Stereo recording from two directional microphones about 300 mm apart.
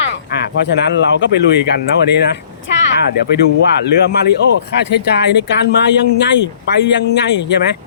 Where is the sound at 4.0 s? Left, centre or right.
Left.